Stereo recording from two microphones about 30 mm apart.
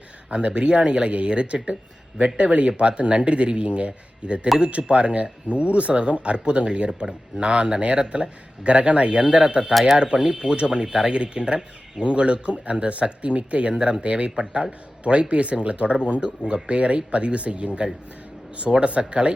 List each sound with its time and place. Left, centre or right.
0.3 s speech: right
14.3 s speech: right
15.0 s speech: right
18.9 s speech: right